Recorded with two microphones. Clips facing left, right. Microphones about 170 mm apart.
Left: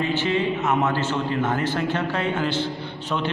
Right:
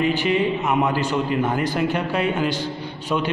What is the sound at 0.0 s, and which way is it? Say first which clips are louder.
A man's voice: right 3 dB; 15° right (ahead or behind).